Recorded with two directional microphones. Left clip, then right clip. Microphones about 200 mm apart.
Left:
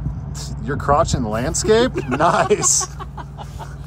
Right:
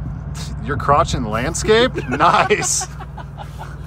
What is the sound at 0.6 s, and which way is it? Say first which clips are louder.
Speech: right 1 dB; 15° left (ahead or behind).